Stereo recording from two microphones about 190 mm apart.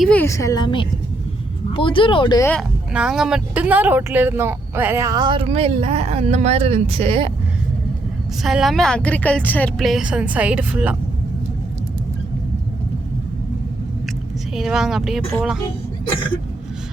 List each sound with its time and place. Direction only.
0.0 s a woman's voice: 10° left (ahead or behind); by 2.5 s 25° left (ahead or behind)
2.5 s speech: centre (ahead or behind); by 7.3 s 30° right (ahead or behind)
8.4 s a woman's voice: centre (ahead or behind)
14.5 s a woman's voice: centre (ahead or behind)